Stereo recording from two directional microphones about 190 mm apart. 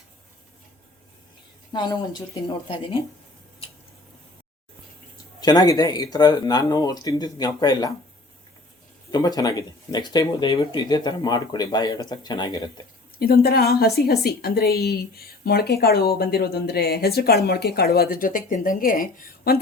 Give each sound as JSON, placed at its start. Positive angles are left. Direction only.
{"t": 1.7, "sound": "speech", "side_deg": 25}
{"t": 5.4, "sound": "speech", "side_deg": 20}
{"t": 9.1, "sound": "speech", "side_deg": 20}
{"t": 13.1, "sound": "a woman's voice", "side_deg": 50}